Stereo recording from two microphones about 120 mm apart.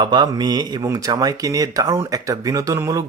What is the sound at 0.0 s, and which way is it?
Speech, 35° right (ahead or behind).